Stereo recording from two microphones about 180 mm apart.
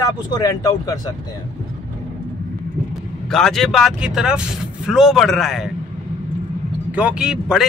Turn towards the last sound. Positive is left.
turn(degrees=-5)  # may be behind; listen again after turning